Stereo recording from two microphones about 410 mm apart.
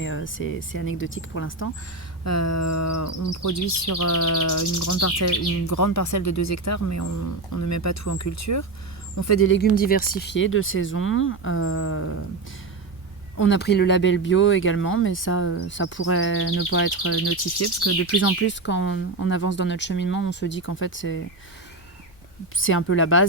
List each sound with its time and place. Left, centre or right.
0.0 s speech: left
2.2 s speech: left
13.3 s speech: left
22.5 s speech: left